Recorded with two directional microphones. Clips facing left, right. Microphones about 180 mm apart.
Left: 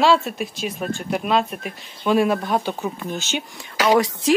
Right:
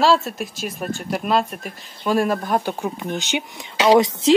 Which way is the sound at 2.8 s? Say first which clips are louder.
Right 1 dB; 15° right (ahead or behind).